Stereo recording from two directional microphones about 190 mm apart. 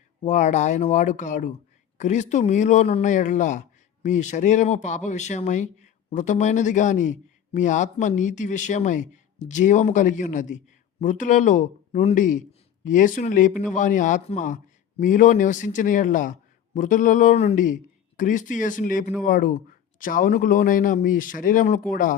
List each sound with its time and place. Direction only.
0.2 s a man's voice: 40° left (ahead or behind)